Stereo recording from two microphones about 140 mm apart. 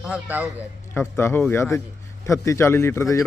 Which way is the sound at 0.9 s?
20° left (ahead or behind).